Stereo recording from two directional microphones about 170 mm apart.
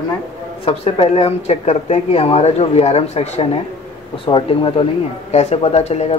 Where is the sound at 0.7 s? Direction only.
35° left (ahead or behind).